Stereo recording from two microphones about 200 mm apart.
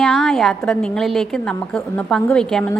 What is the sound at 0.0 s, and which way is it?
A woman's voice, centre (ahead or behind).